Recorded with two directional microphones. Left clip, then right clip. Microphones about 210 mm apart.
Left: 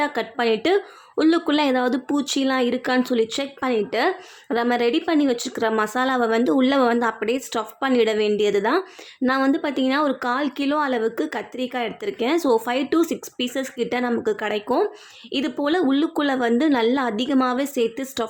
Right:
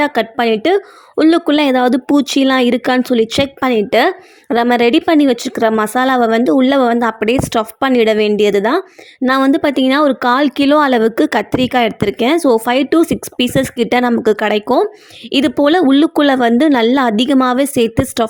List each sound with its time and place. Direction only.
0.0 s a woman's voice: 35° right (ahead or behind)